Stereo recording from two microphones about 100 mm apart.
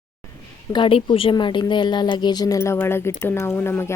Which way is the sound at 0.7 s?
55° left (ahead or behind).